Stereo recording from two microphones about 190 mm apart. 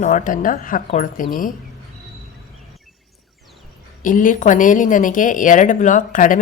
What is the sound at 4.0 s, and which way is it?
Speech, 45° left (ahead or behind).